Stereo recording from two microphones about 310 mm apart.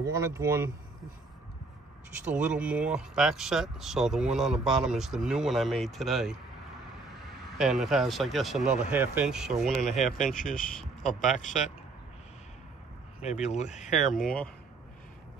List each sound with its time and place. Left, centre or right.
0.0 s speech: centre
2.3 s speech: centre
7.5 s speech: centre
10.1 s speech: left
10.8 s speech: centre
11.3 s speech: left
13.2 s speech: left
14.2 s speech: centre